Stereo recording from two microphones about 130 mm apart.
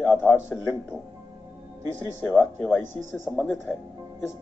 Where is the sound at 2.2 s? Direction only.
10° right (ahead or behind).